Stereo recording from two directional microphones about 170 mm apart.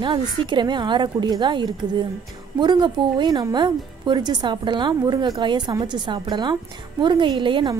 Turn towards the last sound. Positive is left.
turn(degrees=-30)  # may be behind; listen again after turning